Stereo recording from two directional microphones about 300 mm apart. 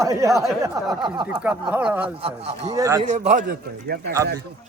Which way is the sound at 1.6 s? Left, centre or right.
Centre.